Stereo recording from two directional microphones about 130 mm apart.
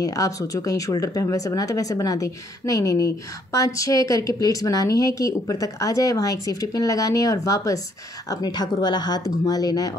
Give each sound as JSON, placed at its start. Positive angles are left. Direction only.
{"t": 0.0, "sound": "speech", "side_deg": 25}